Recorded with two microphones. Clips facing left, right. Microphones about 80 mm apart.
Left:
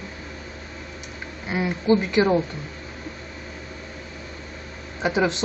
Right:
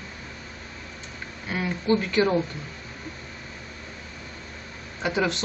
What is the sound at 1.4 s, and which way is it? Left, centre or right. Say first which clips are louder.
Speech: left 4 dB; centre.